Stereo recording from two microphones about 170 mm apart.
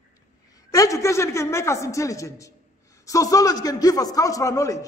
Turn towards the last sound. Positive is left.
turn(degrees=20)  # may be behind; listen again after turning